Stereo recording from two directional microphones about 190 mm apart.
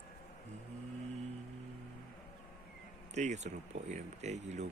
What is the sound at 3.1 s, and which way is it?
Speech, 35° right (ahead or behind).